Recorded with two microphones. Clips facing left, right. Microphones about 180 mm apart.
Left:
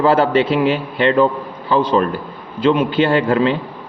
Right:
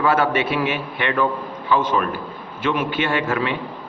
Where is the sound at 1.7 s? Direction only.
30° left (ahead or behind).